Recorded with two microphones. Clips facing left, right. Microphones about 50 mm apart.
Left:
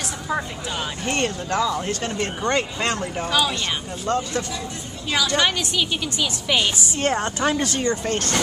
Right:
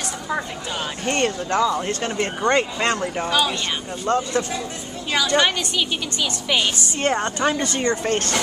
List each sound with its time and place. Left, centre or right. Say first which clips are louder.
1.0 s a woman's voice: right 3 dB; centre
8.0 s speech: right 2 dB; right